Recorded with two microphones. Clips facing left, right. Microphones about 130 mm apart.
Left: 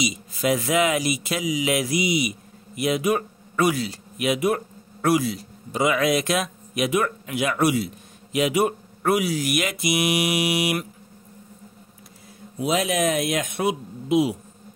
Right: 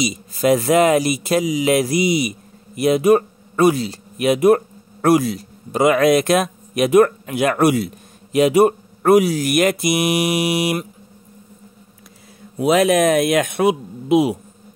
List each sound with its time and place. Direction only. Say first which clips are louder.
0.0 s speech: right 6 dB; 40° right (ahead or behind)
4.2 s a man's voice: right 8 dB; 45° right (ahead or behind)
12.5 s speech: right 8 dB; 60° right (ahead or behind)